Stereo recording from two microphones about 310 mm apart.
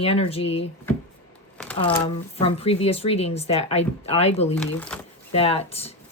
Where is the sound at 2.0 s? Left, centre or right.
Centre.